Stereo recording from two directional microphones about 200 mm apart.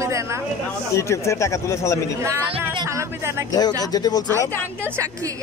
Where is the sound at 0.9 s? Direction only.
15° left (ahead or behind).